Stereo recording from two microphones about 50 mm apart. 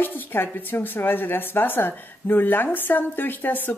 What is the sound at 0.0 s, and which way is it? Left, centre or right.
A woman's voice, left.